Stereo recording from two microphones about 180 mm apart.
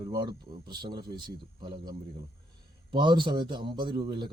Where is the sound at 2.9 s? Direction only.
25° right (ahead or behind).